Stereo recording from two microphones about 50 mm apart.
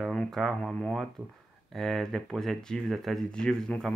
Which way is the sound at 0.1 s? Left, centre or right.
Centre.